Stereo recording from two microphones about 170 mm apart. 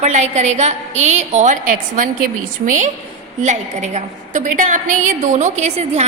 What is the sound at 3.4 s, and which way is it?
A woman's voice, 45° right (ahead or behind).